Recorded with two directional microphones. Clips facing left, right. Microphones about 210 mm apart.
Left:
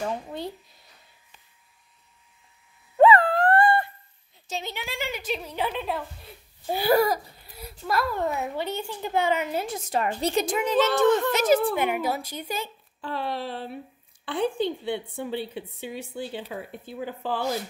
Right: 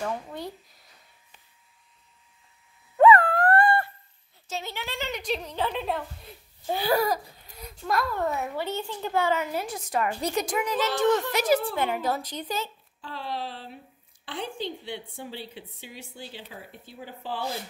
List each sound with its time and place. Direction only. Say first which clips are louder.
0.0 s a woman's voice: left 2 dB; 25° left (ahead or behind)
3.0 s dog: left 1 dB; 25° left (ahead or behind)
4.5 s a woman's voice: left 1 dB; 15° left (ahead or behind)
8.2 s a woman's voice: left 1 dB; 20° left (ahead or behind)
13.0 s a woman's voice: left 4 dB; 60° left (ahead or behind)